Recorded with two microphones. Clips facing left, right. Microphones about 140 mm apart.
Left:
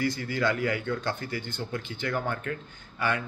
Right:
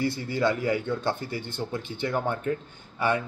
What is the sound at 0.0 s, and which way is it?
Speech, 25° right (ahead or behind).